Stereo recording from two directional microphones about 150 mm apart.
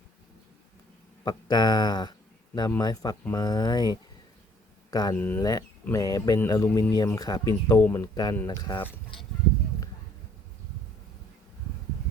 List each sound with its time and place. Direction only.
1.2 s speech: 25° left (ahead or behind)
5.1 s speech: 10° left (ahead or behind)
5.4 s speech: 25° left (ahead or behind)
7.8 s speech: 10° left (ahead or behind)
8.0 s speech: 25° left (ahead or behind)